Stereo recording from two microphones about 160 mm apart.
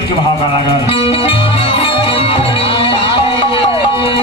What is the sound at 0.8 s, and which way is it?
Music, 35° left (ahead or behind).